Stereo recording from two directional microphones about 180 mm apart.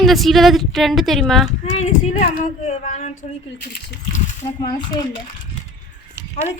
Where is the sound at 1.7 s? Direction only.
45° left (ahead or behind).